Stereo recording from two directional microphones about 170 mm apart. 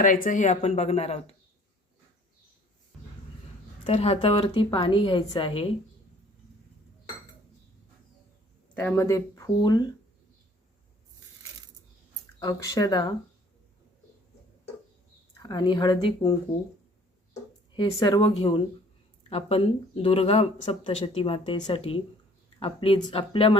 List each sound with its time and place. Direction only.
0.0 s speech: 50° left (ahead or behind)
3.8 s speech: 35° left (ahead or behind)
8.7 s speech: 10° left (ahead or behind)
12.4 s speech: 20° left (ahead or behind)
15.4 s speech: 25° left (ahead or behind)
17.7 s speech: 25° left (ahead or behind)
18.3 s speech: 35° left (ahead or behind)